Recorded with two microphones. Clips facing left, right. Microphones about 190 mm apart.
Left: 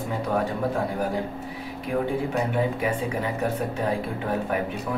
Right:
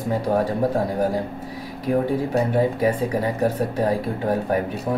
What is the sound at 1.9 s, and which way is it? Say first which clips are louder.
Speech: right 5 dB; 35° right (ahead or behind).